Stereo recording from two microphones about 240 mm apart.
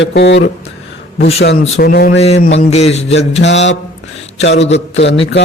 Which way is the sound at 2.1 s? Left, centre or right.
Left.